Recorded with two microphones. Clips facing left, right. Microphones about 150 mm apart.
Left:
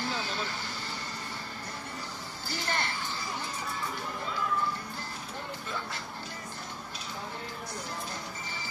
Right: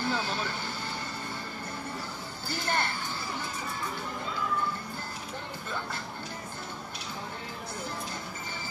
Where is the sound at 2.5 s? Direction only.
55° right (ahead or behind).